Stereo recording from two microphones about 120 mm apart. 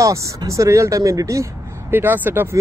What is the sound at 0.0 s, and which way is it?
Speech, 25° right (ahead or behind).